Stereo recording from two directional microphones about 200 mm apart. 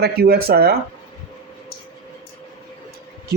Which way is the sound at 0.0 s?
50° right (ahead or behind).